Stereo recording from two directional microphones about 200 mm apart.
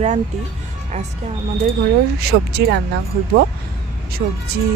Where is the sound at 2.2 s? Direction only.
55° right (ahead or behind).